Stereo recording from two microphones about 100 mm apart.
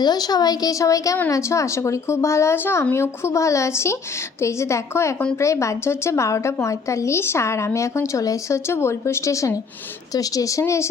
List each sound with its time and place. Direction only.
0.0 s a woman's voice: 45° left (ahead or behind)